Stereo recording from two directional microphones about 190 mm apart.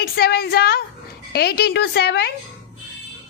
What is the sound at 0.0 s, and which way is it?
A woman's voice, 55° left (ahead or behind).